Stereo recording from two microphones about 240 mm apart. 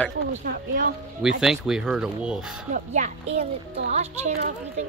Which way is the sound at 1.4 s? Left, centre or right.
Centre.